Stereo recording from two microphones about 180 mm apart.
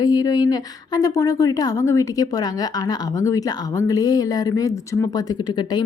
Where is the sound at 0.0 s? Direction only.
20° left (ahead or behind).